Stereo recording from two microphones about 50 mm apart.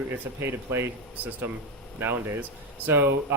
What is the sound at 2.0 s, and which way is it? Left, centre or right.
A man's voice, right.